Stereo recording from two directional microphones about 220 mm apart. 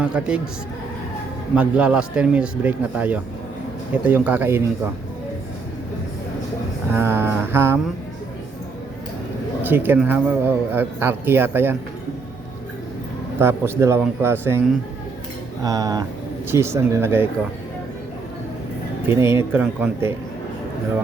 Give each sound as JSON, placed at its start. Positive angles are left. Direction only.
{"t": 0.0, "sound": "speech", "side_deg": -5}
{"t": 1.5, "sound": "speech", "side_deg": -5}
{"t": 6.9, "sound": "speech", "side_deg": -10}
{"t": 9.6, "sound": "speech", "side_deg": -10}
{"t": 13.4, "sound": "speech", "side_deg": -10}
{"t": 15.6, "sound": "speech", "side_deg": -15}
{"t": 19.0, "sound": "speech", "side_deg": -10}